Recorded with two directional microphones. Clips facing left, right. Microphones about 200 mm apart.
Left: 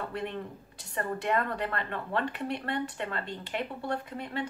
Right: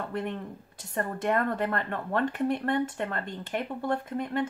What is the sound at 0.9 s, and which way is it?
Speech, 45° right (ahead or behind).